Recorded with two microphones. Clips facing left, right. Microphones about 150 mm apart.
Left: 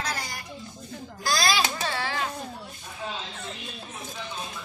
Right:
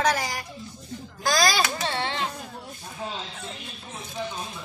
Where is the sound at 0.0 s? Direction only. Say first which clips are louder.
Right 9 dB; 90° right.